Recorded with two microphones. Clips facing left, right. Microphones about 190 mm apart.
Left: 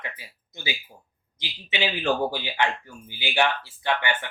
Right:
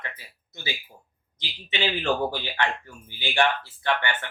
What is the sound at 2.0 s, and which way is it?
Speech, 10° left (ahead or behind).